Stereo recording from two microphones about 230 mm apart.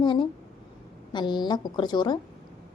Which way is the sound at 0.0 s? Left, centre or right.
Left.